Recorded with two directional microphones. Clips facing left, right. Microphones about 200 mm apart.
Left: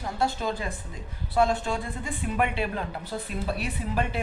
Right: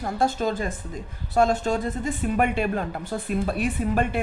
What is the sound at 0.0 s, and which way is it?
Speech, 45° right (ahead or behind).